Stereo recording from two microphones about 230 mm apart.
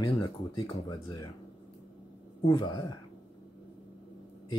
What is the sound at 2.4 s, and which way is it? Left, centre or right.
Speech, left.